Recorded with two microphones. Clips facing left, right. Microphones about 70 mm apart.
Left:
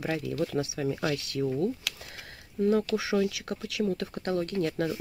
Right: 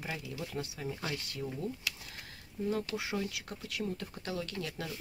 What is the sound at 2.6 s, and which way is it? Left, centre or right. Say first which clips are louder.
Speech: left 9 dB; left.